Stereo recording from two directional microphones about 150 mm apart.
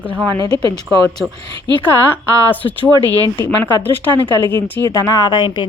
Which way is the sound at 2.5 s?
10° left (ahead or behind).